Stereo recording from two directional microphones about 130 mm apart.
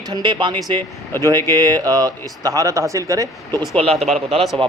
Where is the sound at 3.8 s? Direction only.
50° right (ahead or behind).